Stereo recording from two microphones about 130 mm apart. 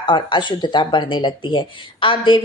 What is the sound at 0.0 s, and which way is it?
Speech, 35° left (ahead or behind).